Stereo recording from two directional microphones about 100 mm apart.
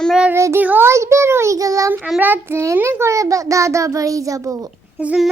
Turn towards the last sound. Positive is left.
turn(degrees=-10)  # may be behind; listen again after turning